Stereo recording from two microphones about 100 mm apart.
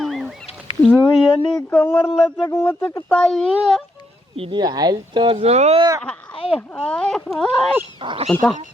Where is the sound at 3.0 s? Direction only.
10° left (ahead or behind).